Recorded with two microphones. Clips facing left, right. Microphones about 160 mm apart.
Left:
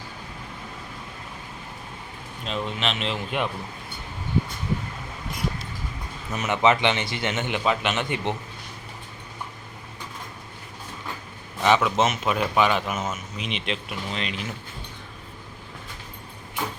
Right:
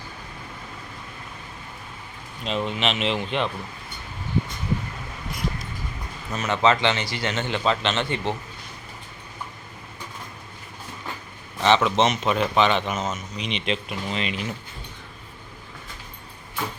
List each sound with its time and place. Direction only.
2.4 s a man's voice: centre (ahead or behind)
6.3 s a man's voice: 15° left (ahead or behind)
11.6 s a man's voice: 5° left (ahead or behind)